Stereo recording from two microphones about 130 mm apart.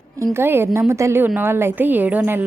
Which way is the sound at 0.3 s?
20° right (ahead or behind).